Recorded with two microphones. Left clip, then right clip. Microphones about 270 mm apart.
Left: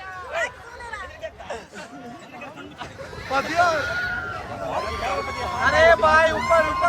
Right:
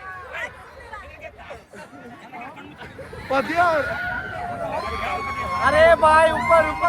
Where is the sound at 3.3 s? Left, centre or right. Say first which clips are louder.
Right 1 dB; centre.